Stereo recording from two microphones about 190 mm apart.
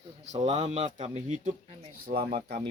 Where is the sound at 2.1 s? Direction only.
55° right (ahead or behind).